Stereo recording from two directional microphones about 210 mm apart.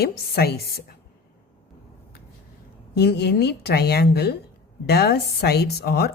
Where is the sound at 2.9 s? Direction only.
50° left (ahead or behind).